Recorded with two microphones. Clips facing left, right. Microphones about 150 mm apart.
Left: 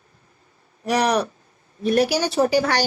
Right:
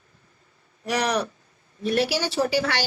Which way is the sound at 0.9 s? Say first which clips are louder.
Left 4 dB; 35° left (ahead or behind).